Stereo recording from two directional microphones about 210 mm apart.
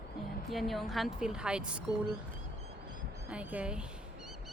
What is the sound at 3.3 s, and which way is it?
Speech, 5° right (ahead or behind).